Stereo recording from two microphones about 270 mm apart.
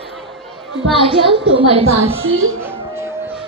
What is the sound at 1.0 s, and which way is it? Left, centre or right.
Speech, centre.